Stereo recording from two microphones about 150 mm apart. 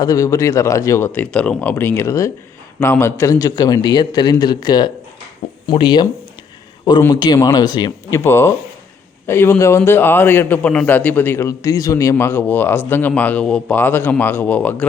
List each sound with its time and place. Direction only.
0.0 s a man's voice: 25° left (ahead or behind)
7.1 s a man's voice: 25° left (ahead or behind)
8.2 s a man's voice: 15° left (ahead or behind)